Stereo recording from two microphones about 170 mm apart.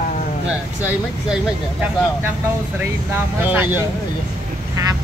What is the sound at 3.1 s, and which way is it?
Speech, 10° right (ahead or behind).